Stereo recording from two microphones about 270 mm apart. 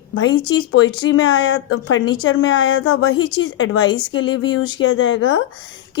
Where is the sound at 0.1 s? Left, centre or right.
Left.